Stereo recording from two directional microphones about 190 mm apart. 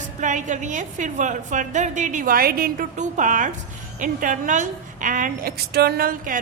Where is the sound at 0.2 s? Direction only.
40° right (ahead or behind).